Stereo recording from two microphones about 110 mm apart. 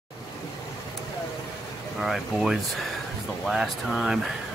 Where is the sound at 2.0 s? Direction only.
Centre (ahead or behind).